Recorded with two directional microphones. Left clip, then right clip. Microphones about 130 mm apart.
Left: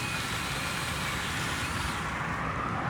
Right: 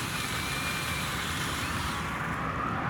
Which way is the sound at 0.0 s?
10° right (ahead or behind).